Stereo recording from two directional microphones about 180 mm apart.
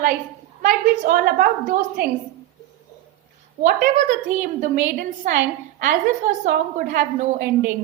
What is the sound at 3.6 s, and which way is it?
Speech, 55° right (ahead or behind).